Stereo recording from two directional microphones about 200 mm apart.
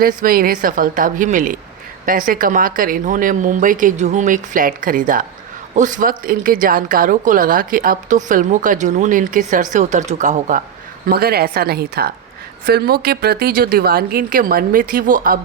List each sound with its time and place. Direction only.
0.0 s a woman's voice: 45° right (ahead or behind)
11.1 s speech: 50° right (ahead or behind)